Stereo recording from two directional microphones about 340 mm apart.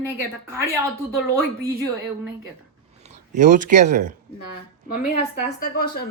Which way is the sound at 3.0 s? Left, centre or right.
Right.